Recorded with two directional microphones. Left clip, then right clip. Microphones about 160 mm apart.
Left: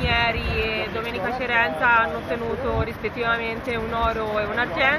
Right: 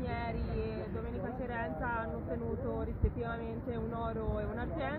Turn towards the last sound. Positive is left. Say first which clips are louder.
# left 17 dB
turn(degrees=10)  # may be behind; listen again after turning